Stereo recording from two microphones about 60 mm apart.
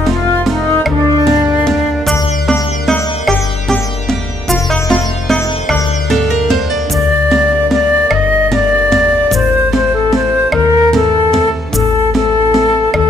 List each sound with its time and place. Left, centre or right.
0.8 s music: centre